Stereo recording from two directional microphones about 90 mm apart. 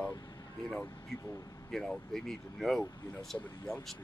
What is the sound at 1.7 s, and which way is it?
Speech, 5° left (ahead or behind).